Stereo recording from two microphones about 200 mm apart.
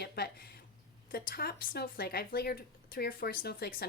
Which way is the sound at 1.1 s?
50° left (ahead or behind).